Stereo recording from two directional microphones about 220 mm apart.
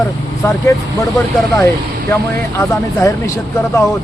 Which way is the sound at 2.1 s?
15° left (ahead or behind).